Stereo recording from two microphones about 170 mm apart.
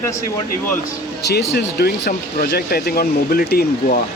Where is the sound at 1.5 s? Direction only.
65° left (ahead or behind).